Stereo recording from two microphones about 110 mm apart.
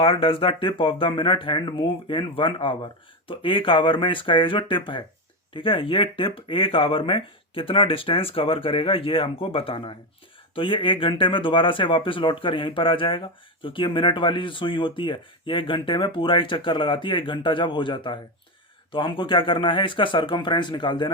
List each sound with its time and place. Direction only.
0.0 s speech: 55° left (ahead or behind)